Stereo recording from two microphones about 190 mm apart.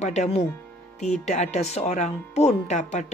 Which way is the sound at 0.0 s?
35° left (ahead or behind).